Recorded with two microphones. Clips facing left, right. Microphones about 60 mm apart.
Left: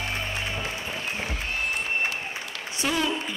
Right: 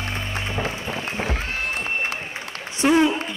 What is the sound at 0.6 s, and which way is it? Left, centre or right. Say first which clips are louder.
Music: right 5 dB; right.